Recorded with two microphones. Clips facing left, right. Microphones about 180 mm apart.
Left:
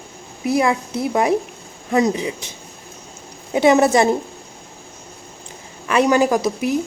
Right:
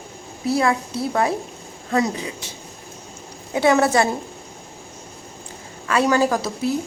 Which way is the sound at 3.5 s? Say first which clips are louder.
Left 3 dB; 20° left (ahead or behind).